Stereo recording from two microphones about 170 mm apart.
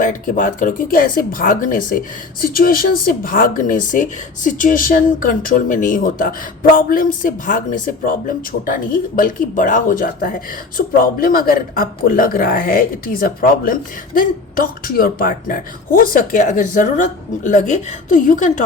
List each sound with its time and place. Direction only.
0.0 s speech: 50° left (ahead or behind)